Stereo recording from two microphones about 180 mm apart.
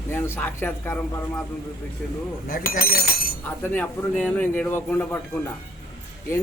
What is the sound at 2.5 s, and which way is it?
Speech, 55° left (ahead or behind).